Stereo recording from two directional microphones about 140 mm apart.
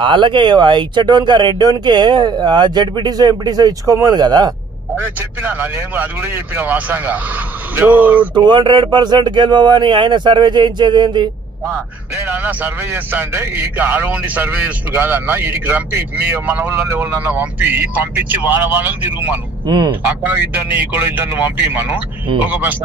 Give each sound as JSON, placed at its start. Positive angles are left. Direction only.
{"t": 0.0, "sound": "speech", "side_deg": -35}
{"t": 4.9, "sound": "a man's voice", "side_deg": -15}
{"t": 8.4, "sound": "speech", "side_deg": -35}
{"t": 11.6, "sound": "a man's voice", "side_deg": -15}
{"t": 19.6, "sound": "speech", "side_deg": -35}
{"t": 20.0, "sound": "a man's voice", "side_deg": -15}